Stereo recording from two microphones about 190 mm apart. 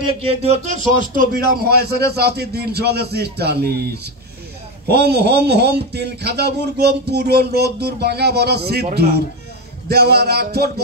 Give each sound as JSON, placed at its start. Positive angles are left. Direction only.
{"t": 0.3, "sound": "a man's voice", "side_deg": -35}